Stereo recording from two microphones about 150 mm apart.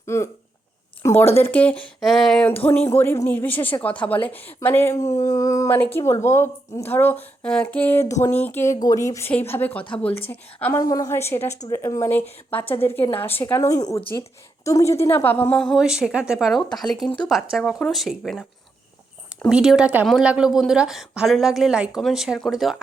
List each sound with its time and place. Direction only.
0.0 s a woman's voice: 20° left (ahead or behind); by 18.4 s centre (ahead or behind)
19.5 s a woman's voice: 5° right (ahead or behind)